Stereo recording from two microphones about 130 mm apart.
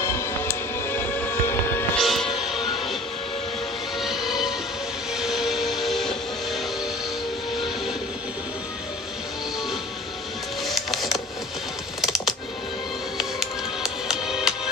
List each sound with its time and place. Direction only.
0.0 s music: 20° left (ahead or behind)
2.0 s music: centre (ahead or behind)
4.0 s music: centre (ahead or behind)
10.6 s music: centre (ahead or behind)
12.0 s typing: centre (ahead or behind)
13.2 s music: centre (ahead or behind)